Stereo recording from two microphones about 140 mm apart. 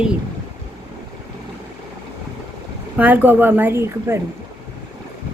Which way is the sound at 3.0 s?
10° right (ahead or behind).